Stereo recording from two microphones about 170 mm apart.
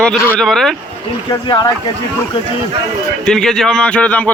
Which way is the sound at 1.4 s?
30° left (ahead or behind).